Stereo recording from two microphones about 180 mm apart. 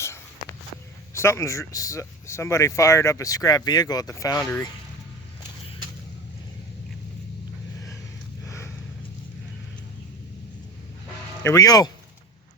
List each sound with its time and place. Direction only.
1.1 s speech: 15° left (ahead or behind)
8.4 s a sound: 15° left (ahead or behind)
11.4 s speech: 20° left (ahead or behind)